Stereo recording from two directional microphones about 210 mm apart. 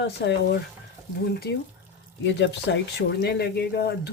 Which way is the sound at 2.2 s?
55° left (ahead or behind).